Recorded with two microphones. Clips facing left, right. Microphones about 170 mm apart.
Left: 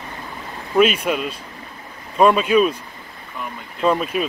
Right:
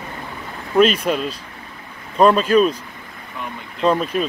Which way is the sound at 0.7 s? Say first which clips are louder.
Right 1 dB; 5° left (ahead or behind).